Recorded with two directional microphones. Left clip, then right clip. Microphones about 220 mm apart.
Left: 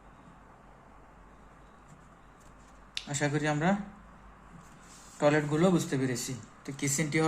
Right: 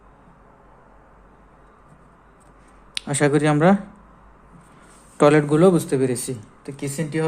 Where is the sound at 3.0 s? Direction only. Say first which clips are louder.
Right 12 dB; 45° right (ahead or behind).